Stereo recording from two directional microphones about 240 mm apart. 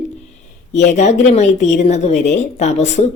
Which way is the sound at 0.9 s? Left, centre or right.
Left.